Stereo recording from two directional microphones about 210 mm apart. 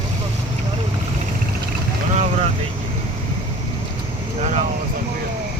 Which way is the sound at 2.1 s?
35° right (ahead or behind).